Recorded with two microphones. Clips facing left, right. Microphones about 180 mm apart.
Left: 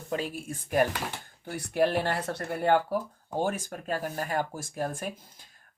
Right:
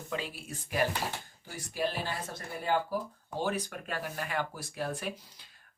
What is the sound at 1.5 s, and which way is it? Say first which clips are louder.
Speech: left 8 dB; 60° left (ahead or behind).